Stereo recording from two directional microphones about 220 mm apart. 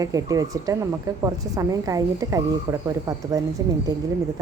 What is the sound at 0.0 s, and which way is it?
Speech, 15° right (ahead or behind).